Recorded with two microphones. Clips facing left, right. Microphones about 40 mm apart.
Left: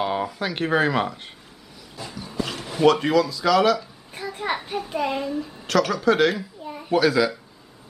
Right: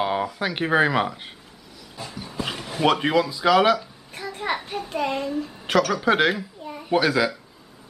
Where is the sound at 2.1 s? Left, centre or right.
Centre.